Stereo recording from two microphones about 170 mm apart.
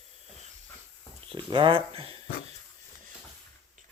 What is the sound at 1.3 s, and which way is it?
Speech, 30° right (ahead or behind).